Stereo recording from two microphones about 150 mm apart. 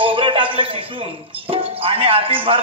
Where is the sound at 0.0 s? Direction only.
35° right (ahead or behind).